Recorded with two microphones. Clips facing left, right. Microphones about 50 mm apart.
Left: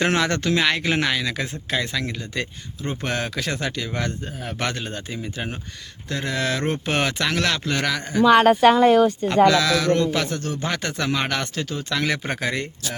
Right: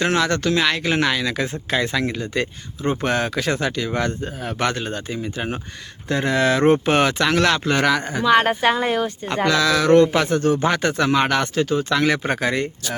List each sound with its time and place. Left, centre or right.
0.0 s speech: centre
6.1 s speech: right
6.8 s speech: centre
9.3 s speech: centre
9.9 s speech: right; by 12.6 s centre